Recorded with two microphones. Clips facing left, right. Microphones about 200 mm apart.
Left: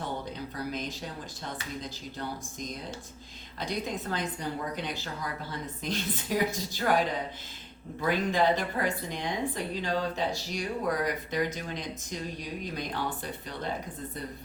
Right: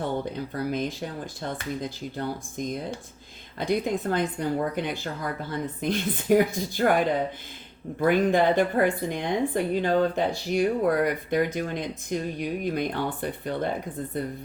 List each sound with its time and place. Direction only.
0.5 s a woman's voice: 55° right (ahead or behind)
8.0 s a woman's voice: 55° right (ahead or behind)